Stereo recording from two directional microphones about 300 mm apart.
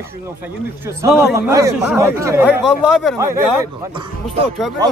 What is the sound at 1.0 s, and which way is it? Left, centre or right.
Speech, centre.